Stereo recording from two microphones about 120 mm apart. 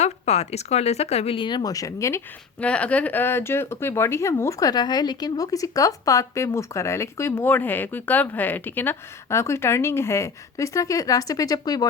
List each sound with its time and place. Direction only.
0.0 s speech: 65° left (ahead or behind); by 2.2 s 25° left (ahead or behind)
2.6 s speech: 10° left (ahead or behind); by 11.9 s 35° left (ahead or behind)